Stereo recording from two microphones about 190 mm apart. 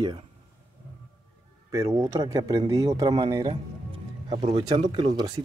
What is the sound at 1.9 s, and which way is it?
Speech, 20° right (ahead or behind).